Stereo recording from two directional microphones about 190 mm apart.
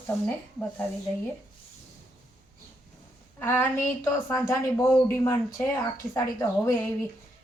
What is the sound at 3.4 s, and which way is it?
Speech, 10° left (ahead or behind).